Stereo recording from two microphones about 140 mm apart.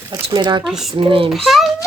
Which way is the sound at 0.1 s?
35° right (ahead or behind).